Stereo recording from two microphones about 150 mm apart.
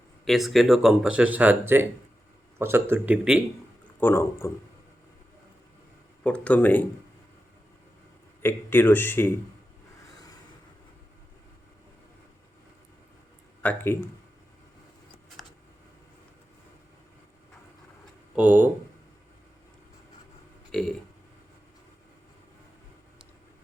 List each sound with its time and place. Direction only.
0.3 s speech: centre (ahead or behind)
4.0 s speech: 15° left (ahead or behind)
6.2 s speech: 10° left (ahead or behind)
8.4 s speech: 15° left (ahead or behind)
13.6 s speech: 10° left (ahead or behind)
18.3 s speech: 10° right (ahead or behind)
20.7 s speech: 5° left (ahead or behind)